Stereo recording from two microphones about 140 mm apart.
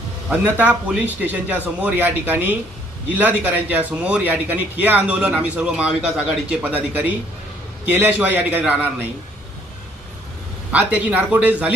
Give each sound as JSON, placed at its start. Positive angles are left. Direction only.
{"t": 0.3, "sound": "a man's voice", "side_deg": -10}
{"t": 10.7, "sound": "a man's voice", "side_deg": -10}